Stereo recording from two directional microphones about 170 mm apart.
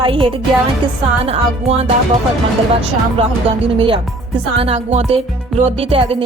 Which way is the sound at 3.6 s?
30° right (ahead or behind).